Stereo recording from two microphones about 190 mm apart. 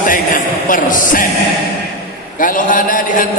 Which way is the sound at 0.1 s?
45° left (ahead or behind).